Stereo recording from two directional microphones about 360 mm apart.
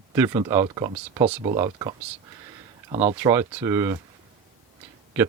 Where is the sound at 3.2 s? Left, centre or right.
Centre.